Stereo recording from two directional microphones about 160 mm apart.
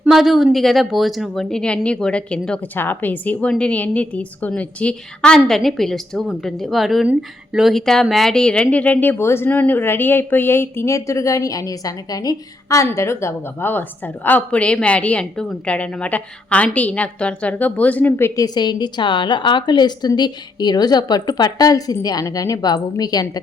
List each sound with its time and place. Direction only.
0.0 s speech: centre (ahead or behind)
18.3 s a woman's voice: 25° left (ahead or behind)